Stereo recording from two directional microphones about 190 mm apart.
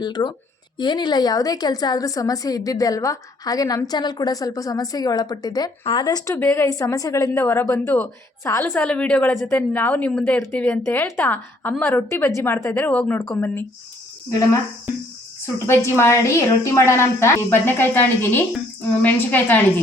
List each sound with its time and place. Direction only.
0.0 s a woman's voice: 20° left (ahead or behind)